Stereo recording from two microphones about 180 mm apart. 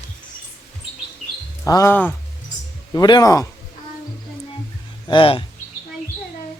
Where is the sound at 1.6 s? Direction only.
15° left (ahead or behind).